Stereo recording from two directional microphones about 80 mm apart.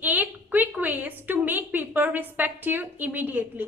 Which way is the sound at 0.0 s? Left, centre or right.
Right.